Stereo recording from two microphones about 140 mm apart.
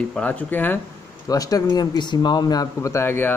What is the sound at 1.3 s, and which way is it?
Speech, 25° left (ahead or behind).